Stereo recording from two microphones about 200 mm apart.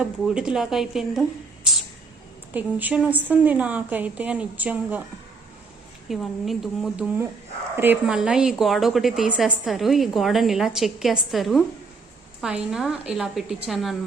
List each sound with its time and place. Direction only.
0.0 s a woman's voice: 5° right (ahead or behind)
2.5 s a woman's voice: 10° right (ahead or behind)
6.1 s a woman's voice: centre (ahead or behind)